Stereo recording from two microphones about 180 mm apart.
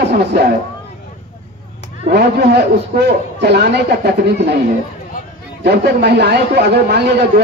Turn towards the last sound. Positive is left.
turn(degrees=-65)  # may be behind; listen again after turning